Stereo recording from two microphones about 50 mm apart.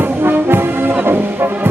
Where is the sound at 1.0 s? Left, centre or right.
Right.